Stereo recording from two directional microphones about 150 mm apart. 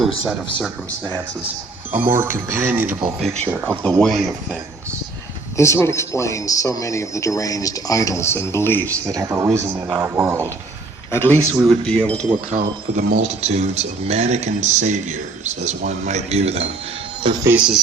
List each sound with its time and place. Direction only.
0.6 s speech: 10° left (ahead or behind)
1.9 s speech: 15° right (ahead or behind)
3.8 s speech: 5° left (ahead or behind)
5.5 s speech: 20° left (ahead or behind)
9.0 s speech: 20° right (ahead or behind)
11.1 s speech: 15° left (ahead or behind)
11.6 s speech: 5° left (ahead or behind)
12.5 s speech: 55° right (ahead or behind)
17.2 s speech: 30° right (ahead or behind)
17.5 s speech: 5° right (ahead or behind)